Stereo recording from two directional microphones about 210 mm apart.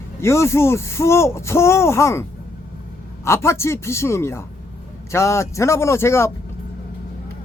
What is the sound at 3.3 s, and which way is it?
Speech, 10° left (ahead or behind).